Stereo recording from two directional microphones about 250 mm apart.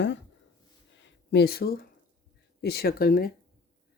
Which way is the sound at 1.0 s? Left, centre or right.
Left.